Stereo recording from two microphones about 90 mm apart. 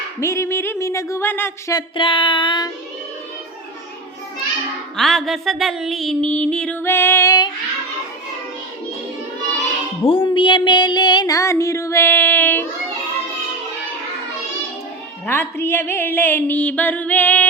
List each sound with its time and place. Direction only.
0.2 s a sound: 30° left (ahead or behind)
1.3 s speech: 25° left (ahead or behind)
2.0 s child singing: 70° left (ahead or behind)
4.9 s music: centre (ahead or behind)
6.2 s music: 15° left (ahead or behind)
6.7 s speech: 25° left (ahead or behind)
7.3 s child singing: 50° left (ahead or behind)
10.0 s music: 80° left; by 11.3 s 50° left (ahead or behind)
11.3 s child singing: 35° left (ahead or behind)
15.3 s speech: 25° left (ahead or behind)